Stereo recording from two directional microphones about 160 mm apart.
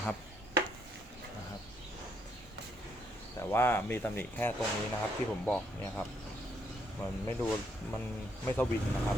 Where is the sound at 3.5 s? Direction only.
15° left (ahead or behind).